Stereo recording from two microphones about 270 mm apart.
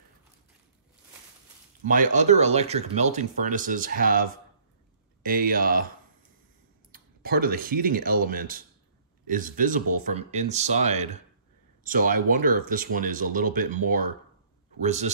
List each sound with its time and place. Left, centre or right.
1.9 s speech: right
6.9 s speech: right